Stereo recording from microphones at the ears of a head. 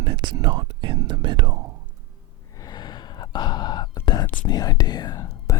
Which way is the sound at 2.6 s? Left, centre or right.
Left.